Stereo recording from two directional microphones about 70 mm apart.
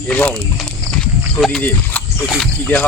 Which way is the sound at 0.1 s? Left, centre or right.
Centre.